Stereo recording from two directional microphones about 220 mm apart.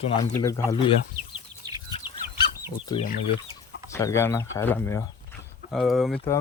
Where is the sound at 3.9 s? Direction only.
10° left (ahead or behind).